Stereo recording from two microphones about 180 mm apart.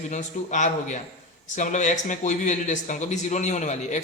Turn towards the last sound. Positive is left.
turn(degrees=40)  # may be behind; listen again after turning